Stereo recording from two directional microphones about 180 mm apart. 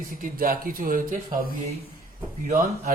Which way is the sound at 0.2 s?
50° right (ahead or behind).